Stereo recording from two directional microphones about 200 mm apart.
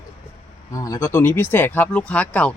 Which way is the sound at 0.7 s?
15° left (ahead or behind).